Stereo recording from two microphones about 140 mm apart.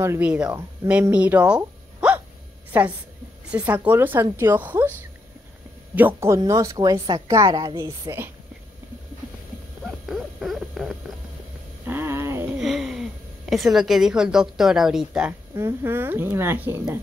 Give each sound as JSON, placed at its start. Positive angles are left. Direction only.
{"t": 0.0, "sound": "speech", "side_deg": -20}
{"t": 0.3, "sound": "speech", "side_deg": -5}
{"t": 5.9, "sound": "speech", "side_deg": -15}
{"t": 9.8, "sound": "owl", "side_deg": 0}
{"t": 11.8, "sound": "a sound", "side_deg": -15}
{"t": 12.5, "sound": "a sound", "side_deg": 0}
{"t": 13.5, "sound": "a woman's voice", "side_deg": 0}
{"t": 15.5, "sound": "speech", "side_deg": -15}